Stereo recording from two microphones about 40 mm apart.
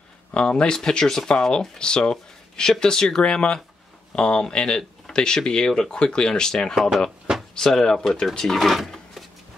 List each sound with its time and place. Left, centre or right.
0.3 s speech: left
6.7 s speech: centre
7.5 s speech: centre
8.5 s speech: centre